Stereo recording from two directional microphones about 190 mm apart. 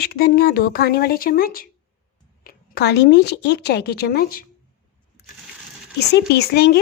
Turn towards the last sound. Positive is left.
turn(degrees=60)  # may be behind; listen again after turning